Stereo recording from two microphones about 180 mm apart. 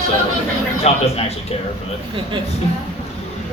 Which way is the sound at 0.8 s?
35° left (ahead or behind).